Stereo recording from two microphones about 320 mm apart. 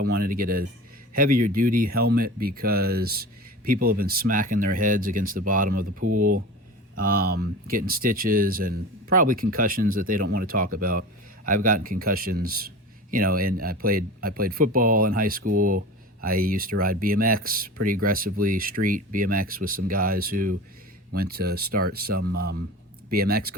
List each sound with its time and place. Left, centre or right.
0.0 s a man's voice: right